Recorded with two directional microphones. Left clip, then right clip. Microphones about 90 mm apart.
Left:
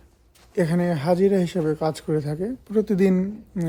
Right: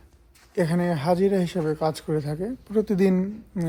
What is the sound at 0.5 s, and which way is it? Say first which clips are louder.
Speech: left 1 dB; 25° left (ahead or behind).